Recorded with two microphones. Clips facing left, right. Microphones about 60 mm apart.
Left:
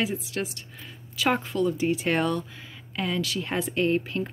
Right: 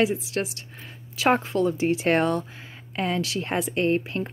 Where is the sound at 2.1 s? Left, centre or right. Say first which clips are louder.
Right 3 dB; right.